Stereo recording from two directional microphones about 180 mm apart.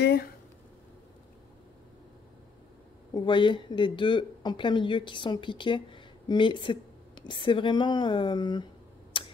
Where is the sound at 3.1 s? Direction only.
25° left (ahead or behind).